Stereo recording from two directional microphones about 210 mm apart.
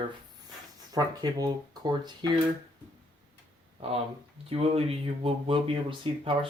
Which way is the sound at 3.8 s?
25° right (ahead or behind).